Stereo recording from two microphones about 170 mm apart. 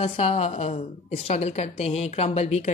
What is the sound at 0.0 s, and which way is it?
Speech, 35° left (ahead or behind).